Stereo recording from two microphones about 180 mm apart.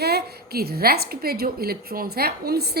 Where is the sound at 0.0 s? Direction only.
60° right (ahead or behind).